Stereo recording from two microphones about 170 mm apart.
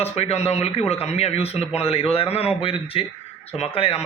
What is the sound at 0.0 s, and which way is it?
Speech, 35° left (ahead or behind).